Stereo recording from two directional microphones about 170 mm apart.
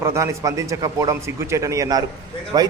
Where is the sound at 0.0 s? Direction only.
15° right (ahead or behind).